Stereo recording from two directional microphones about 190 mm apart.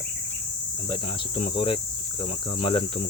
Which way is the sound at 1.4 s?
25° left (ahead or behind).